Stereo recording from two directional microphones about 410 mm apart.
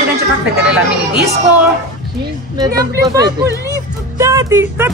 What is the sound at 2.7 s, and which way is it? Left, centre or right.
Speech, centre.